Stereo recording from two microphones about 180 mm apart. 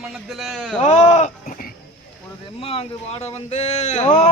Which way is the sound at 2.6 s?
30° left (ahead or behind).